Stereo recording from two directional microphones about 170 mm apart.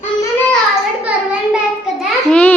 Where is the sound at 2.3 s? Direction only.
5° left (ahead or behind).